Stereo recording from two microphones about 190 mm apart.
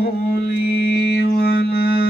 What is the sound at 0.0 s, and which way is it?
Mantra, 55° left (ahead or behind).